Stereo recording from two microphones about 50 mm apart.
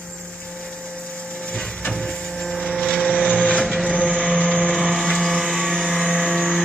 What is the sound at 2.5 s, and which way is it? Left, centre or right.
Vehicle, centre.